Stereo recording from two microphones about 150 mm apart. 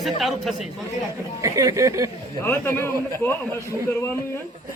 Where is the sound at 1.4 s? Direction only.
20° right (ahead or behind).